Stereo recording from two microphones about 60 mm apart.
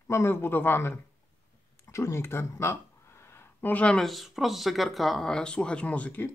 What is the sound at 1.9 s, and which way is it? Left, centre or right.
Speech, left.